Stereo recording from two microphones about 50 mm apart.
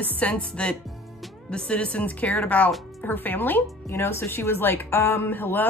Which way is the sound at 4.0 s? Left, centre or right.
Left.